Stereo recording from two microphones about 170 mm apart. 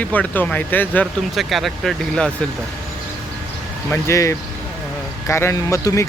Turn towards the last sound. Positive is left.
turn(degrees=15)  # may be behind; listen again after turning